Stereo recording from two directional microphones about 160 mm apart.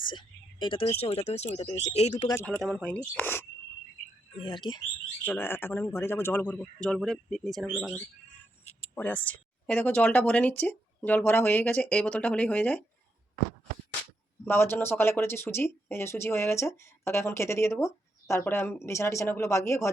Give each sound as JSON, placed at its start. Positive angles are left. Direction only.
{"t": 0.0, "sound": "speech", "side_deg": 30}
{"t": 2.6, "sound": "speech", "side_deg": 0}
{"t": 4.4, "sound": "speech", "side_deg": 30}
{"t": 5.2, "sound": "speech", "side_deg": 15}
{"t": 9.0, "sound": "speech", "side_deg": 10}
{"t": 14.4, "sound": "speech", "side_deg": 15}